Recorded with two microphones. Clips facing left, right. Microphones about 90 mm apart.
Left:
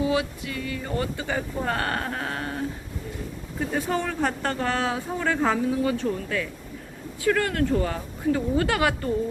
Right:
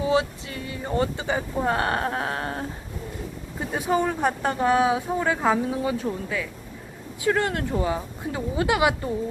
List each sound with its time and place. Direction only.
0.0 s speech: 30° right (ahead or behind)
3.6 s speech: 20° right (ahead or behind)
7.3 s speech: 25° right (ahead or behind)